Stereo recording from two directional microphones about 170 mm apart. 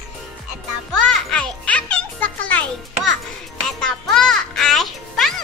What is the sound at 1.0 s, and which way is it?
Music, 5° left (ahead or behind).